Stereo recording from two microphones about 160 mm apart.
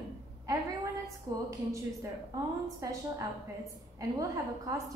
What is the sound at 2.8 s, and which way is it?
A woman's voice, 20° right (ahead or behind).